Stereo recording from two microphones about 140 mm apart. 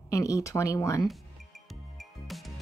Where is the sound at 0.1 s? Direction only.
25° left (ahead or behind).